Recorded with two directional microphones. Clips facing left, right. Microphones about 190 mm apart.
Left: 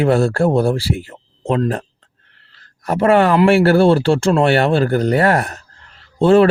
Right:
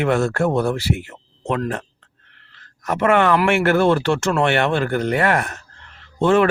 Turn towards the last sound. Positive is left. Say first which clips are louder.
# left 5 dB
turn(degrees=35)  # may be behind; listen again after turning